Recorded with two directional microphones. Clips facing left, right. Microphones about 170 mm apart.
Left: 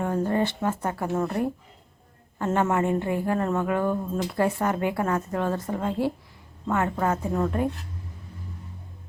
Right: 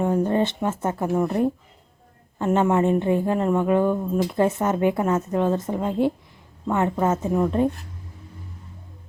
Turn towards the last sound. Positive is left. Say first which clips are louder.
# right 4 dB
turn(degrees=-15)  # may be behind; listen again after turning